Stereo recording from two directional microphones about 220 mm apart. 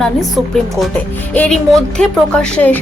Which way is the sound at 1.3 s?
5° left (ahead or behind).